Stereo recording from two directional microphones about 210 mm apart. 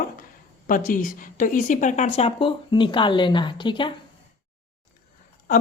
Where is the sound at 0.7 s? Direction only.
40° left (ahead or behind); by 3.9 s 25° left (ahead or behind).